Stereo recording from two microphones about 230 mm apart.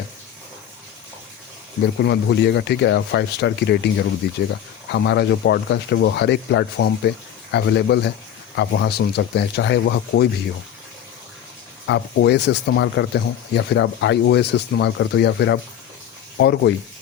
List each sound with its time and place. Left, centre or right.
2.0 s speech: left
11.9 s speech: left